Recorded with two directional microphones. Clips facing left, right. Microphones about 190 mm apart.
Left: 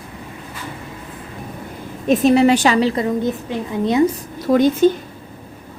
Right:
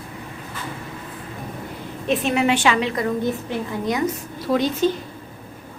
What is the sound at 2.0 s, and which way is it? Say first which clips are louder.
A woman's voice: left 7 dB; 40° left (ahead or behind).